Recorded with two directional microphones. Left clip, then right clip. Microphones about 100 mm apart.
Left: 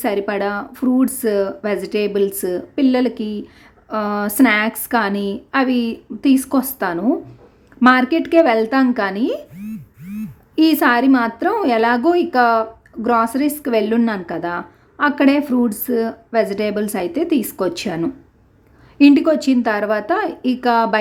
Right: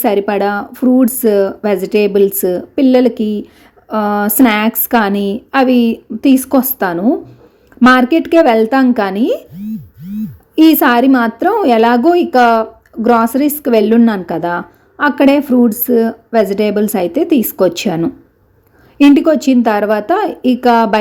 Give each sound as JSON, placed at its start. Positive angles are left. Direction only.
{"t": 0.0, "sound": "speech", "side_deg": -30}
{"t": 10.5, "sound": "speech", "side_deg": -20}
{"t": 19.1, "sound": "speech", "side_deg": -20}